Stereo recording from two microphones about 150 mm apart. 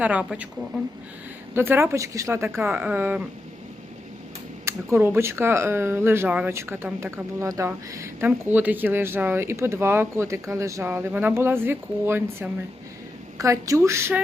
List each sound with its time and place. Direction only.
0.0 s speech: 10° right (ahead or behind)
1.5 s speech: 15° right (ahead or behind)
4.6 s a woman's voice: 15° right (ahead or behind)